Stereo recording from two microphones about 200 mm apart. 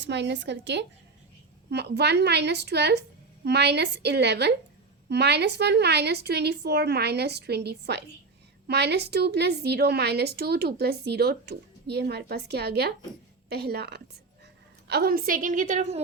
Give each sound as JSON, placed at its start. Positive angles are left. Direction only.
{"t": 0.0, "sound": "a woman's voice", "side_deg": -60}